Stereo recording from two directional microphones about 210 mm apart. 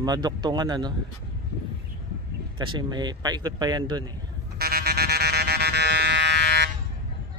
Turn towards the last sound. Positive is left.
turn(degrees=-55)  # may be behind; listen again after turning